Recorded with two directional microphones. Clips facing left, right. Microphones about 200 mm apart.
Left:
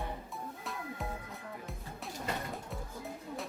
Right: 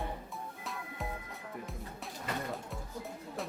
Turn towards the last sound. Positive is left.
turn(degrees=0)  # may be behind; listen again after turning